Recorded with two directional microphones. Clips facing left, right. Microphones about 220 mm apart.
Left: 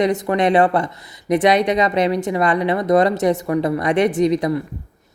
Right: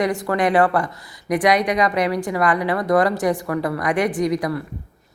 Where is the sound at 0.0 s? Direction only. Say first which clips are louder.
Left 3 dB; 20° left (ahead or behind).